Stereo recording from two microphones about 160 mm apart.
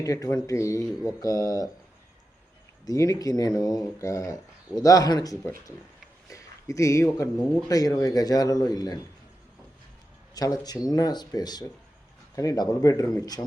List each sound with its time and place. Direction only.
0.0 s speech: 20° left (ahead or behind)
2.8 s speech: 20° left (ahead or behind)
10.3 s speech: 25° left (ahead or behind)